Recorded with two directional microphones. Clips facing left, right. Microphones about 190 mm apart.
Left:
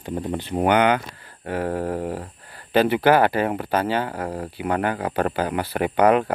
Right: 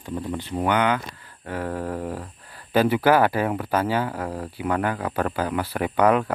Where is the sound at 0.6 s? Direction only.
65° left (ahead or behind).